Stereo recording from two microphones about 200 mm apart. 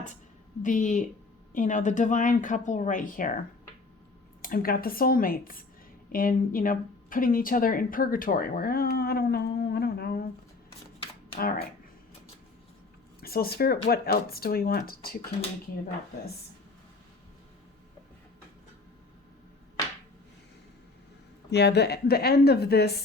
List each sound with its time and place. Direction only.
0.6 s speech: 40° left (ahead or behind)
4.4 s speech: 45° left (ahead or behind)
11.3 s speech: 50° left (ahead or behind)
13.2 s speech: 50° left (ahead or behind)
21.5 s speech: 55° left (ahead or behind)